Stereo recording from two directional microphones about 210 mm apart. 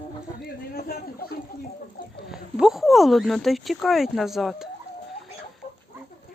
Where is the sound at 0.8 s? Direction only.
45° left (ahead or behind).